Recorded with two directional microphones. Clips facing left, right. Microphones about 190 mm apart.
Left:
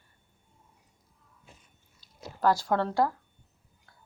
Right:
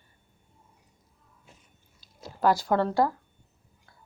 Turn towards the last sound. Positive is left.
turn(degrees=-5)  # may be behind; listen again after turning